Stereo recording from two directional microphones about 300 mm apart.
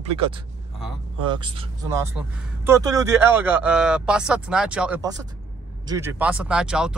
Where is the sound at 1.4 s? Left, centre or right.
Centre.